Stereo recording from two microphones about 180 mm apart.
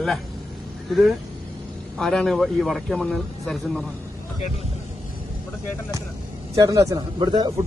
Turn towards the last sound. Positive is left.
turn(degrees=-25)  # may be behind; listen again after turning